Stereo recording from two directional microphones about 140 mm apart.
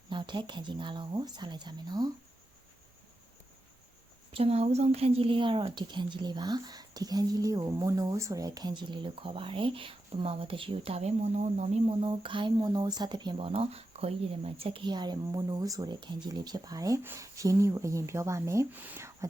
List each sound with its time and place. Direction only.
0.1 s a woman's voice: 35° right (ahead or behind)
4.3 s a woman's voice: 45° right (ahead or behind); by 19.3 s 20° right (ahead or behind)